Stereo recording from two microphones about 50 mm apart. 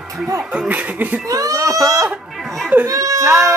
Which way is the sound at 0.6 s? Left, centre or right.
Right.